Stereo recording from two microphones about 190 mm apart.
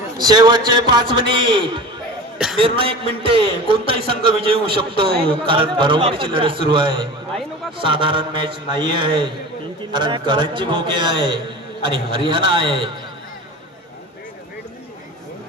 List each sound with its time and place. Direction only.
0.2 s a man's voice: 20° right (ahead or behind)